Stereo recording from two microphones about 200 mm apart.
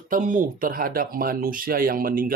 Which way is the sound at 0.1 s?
40° right (ahead or behind).